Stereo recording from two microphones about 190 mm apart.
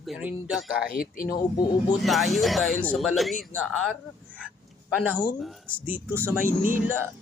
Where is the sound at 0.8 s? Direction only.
50° left (ahead or behind).